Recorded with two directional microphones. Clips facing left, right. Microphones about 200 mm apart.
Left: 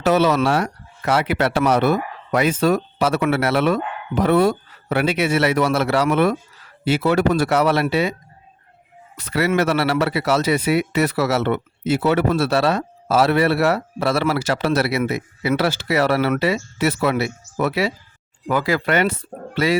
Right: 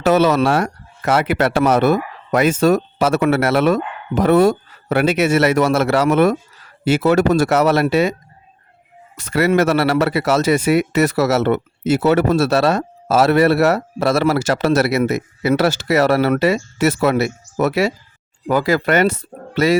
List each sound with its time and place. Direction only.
0.0 s speech: 45° right (ahead or behind)
9.1 s speech: 45° right (ahead or behind)